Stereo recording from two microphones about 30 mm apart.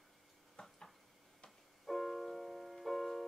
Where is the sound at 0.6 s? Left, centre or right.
Left.